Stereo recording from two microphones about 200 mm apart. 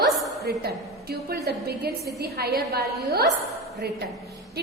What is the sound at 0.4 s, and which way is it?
A woman's voice, 50° right (ahead or behind).